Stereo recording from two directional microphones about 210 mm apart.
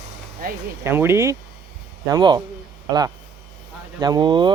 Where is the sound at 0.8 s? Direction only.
10° right (ahead or behind).